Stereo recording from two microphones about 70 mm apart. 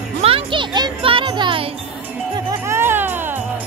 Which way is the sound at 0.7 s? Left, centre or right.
Right.